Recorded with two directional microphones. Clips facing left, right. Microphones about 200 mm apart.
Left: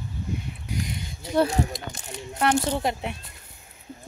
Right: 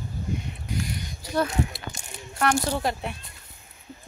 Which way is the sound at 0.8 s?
25° left (ahead or behind).